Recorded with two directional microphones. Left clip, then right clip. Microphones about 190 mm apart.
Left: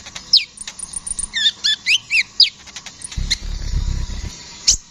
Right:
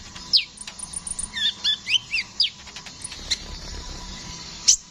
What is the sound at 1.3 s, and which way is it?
Chirp, 30° left (ahead or behind).